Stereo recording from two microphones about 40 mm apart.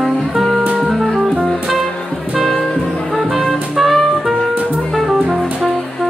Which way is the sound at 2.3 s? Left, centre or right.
Centre.